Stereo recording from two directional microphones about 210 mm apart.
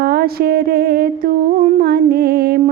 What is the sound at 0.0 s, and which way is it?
Mantra, 45° right (ahead or behind).